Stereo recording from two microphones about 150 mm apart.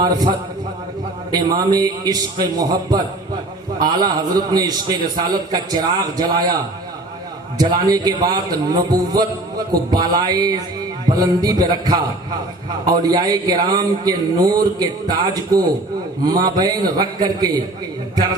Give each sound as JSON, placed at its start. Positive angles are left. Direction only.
{"t": 1.3, "sound": "a man's voice", "side_deg": -25}
{"t": 7.6, "sound": "a man's voice", "side_deg": -25}